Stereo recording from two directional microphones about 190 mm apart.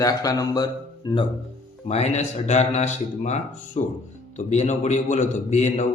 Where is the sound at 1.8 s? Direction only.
35° left (ahead or behind).